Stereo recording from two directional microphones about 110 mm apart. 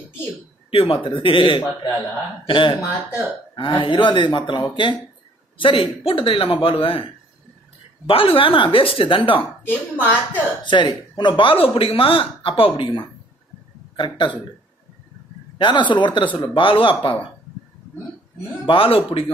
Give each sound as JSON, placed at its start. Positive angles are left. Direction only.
{"t": 0.7, "sound": "speech", "side_deg": 55}
{"t": 8.1, "sound": "speech", "side_deg": 55}
{"t": 9.7, "sound": "speech", "side_deg": 15}
{"t": 10.6, "sound": "speech", "side_deg": 45}
{"t": 15.5, "sound": "speech", "side_deg": 45}
{"t": 18.7, "sound": "speech", "side_deg": 55}